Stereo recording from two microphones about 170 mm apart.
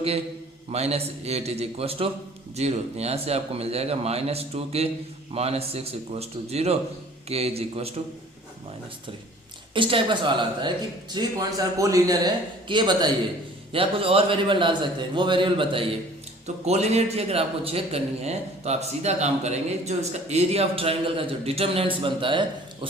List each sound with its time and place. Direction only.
0.7 s a man's voice: 40° right (ahead or behind)
9.7 s a man's voice: 30° right (ahead or behind)